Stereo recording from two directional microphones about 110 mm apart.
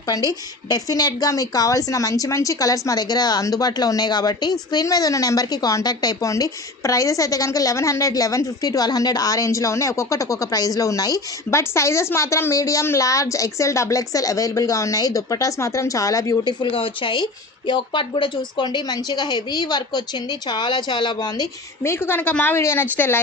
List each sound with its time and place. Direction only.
0.3 s a woman's voice: 35° left (ahead or behind)
16.4 s a woman's voice: 40° left (ahead or behind)
16.7 s a woman's voice: 55° left (ahead or behind)
21.8 s a woman's voice: 20° left (ahead or behind)